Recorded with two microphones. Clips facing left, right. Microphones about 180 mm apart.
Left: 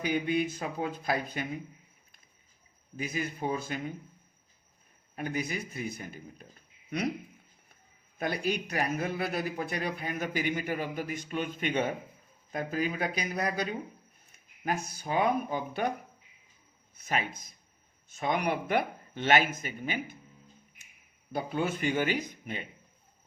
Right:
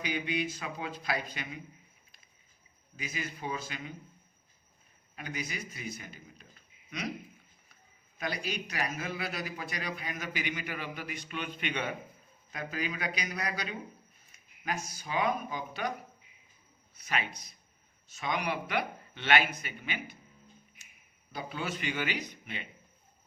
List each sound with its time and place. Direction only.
0.0 s speech: 50° left (ahead or behind)
2.9 s speech: 50° left (ahead or behind)
5.1 s speech: 50° left (ahead or behind)
8.2 s a man's voice: 55° left (ahead or behind)
16.9 s speech: 45° left (ahead or behind)
21.3 s speech: 50° left (ahead or behind)